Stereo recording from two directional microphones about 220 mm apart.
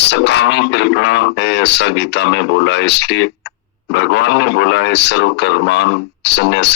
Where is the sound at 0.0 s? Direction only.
50° left (ahead or behind).